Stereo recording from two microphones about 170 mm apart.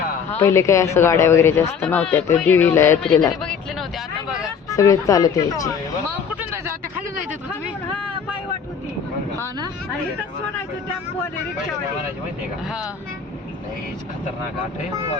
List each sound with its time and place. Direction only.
0.3 s speech: 15° left (ahead or behind)
3.0 s speech: 5° left (ahead or behind)
4.7 s speech: 20° left (ahead or behind)